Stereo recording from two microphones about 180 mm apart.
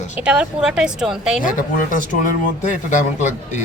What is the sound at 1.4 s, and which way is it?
Speech, 45° left (ahead or behind).